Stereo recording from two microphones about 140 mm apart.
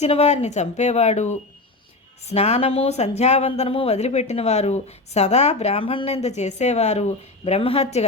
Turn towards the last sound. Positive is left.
turn(degrees=45)  # may be behind; listen again after turning